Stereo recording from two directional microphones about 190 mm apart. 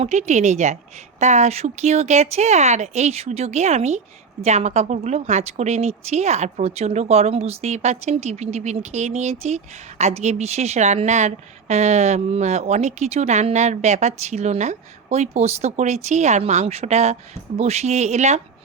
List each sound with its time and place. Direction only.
0.0 s a woman's voice: 35° right (ahead or behind)